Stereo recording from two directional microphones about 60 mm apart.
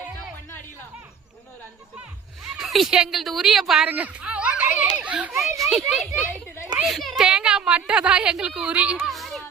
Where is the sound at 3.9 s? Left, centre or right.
Right.